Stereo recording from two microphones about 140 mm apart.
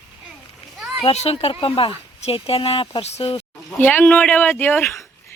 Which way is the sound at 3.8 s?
10° left (ahead or behind).